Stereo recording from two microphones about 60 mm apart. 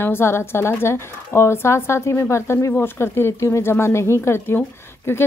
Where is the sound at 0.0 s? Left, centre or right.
Left.